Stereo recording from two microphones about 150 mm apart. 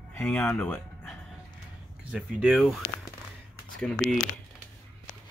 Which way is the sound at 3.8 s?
5° left (ahead or behind).